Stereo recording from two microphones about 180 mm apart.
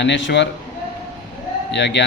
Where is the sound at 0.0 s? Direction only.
80° left.